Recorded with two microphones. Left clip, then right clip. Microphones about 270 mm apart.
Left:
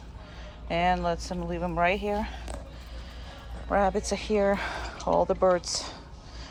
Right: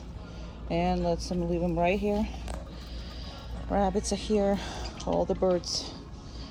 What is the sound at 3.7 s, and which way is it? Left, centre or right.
Speech, left.